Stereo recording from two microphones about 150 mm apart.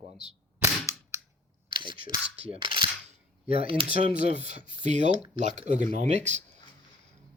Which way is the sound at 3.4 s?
75° left (ahead or behind).